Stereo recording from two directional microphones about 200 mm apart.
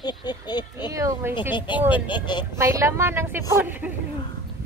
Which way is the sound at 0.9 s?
15° right (ahead or behind).